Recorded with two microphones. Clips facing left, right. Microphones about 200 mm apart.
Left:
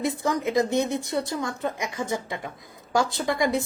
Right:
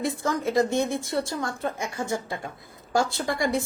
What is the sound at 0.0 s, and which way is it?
A woman's voice, 20° left (ahead or behind).